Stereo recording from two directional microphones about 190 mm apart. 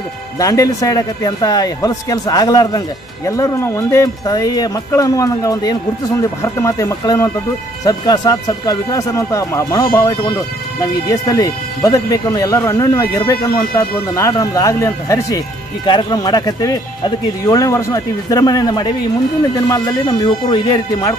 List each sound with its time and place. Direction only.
0.4 s speech: 20° left (ahead or behind)